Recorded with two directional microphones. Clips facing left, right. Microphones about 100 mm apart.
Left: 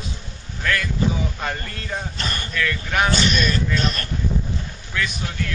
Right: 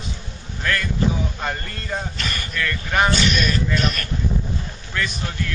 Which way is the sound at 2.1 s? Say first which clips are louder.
Even; 35° left (ahead or behind).